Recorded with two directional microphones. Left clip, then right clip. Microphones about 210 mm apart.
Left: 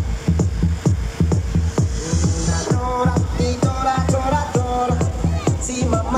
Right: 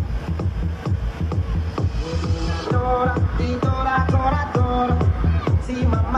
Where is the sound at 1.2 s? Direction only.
30° left (ahead or behind).